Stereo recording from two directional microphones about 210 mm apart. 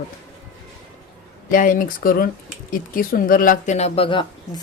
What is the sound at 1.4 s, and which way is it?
Speech, 40° left (ahead or behind).